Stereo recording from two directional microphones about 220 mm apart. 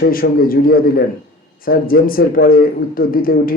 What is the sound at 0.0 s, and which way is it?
A man's voice, 40° left (ahead or behind).